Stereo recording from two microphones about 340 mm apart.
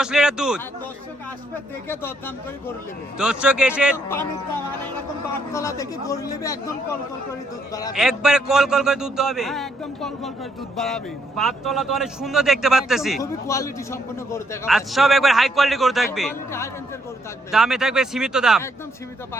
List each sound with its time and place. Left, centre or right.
0.0 s a man's voice: centre
1.9 s a man's voice: centre
5.5 s a man's voice: centre
7.7 s a man's voice: centre
7.9 s a man's voice: centre